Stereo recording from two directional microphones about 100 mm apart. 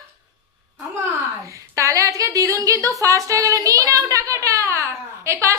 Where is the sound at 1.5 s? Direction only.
30° right (ahead or behind).